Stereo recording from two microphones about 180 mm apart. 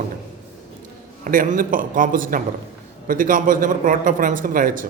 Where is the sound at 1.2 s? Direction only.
50° right (ahead or behind).